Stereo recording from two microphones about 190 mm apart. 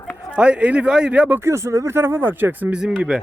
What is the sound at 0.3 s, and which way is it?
Speech, 5° right (ahead or behind).